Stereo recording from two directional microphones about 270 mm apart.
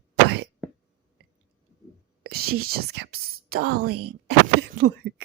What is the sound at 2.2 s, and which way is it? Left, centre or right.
Speech, right.